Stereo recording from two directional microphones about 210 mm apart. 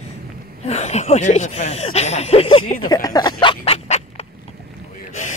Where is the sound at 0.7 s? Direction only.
30° left (ahead or behind).